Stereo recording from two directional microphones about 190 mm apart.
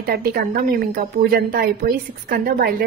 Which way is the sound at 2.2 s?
50° right (ahead or behind).